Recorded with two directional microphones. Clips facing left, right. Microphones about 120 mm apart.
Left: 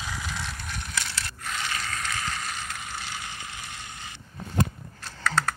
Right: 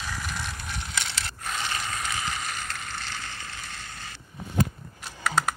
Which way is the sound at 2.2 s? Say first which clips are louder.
Right 1 dB; 5° right (ahead or behind).